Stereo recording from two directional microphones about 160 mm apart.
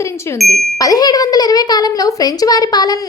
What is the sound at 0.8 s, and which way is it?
A child's voice, 25° left (ahead or behind).